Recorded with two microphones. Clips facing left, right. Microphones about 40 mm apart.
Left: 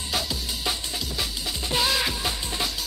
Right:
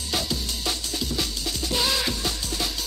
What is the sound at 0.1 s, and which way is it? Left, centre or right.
Music, centre.